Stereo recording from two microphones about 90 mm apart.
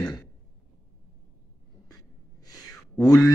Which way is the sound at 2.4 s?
45° left (ahead or behind).